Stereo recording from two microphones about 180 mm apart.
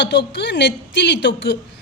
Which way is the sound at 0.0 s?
75° left (ahead or behind).